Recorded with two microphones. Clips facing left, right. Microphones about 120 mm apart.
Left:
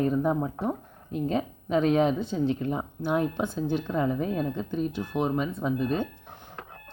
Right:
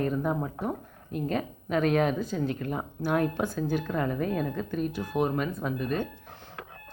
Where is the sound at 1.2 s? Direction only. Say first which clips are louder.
Left 2 dB; 25° left (ahead or behind).